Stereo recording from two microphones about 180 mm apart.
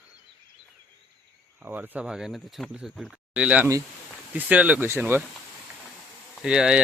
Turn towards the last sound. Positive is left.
turn(degrees=-5)  # may be behind; listen again after turning